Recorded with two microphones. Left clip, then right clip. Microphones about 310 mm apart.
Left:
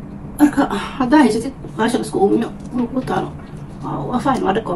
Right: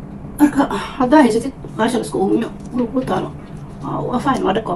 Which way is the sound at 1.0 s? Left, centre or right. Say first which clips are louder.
Right 2 dB; centre.